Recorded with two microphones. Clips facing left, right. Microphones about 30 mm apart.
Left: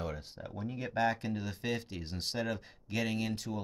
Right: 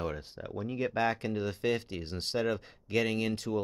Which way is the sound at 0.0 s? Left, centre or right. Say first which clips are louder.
Right 4 dB; centre.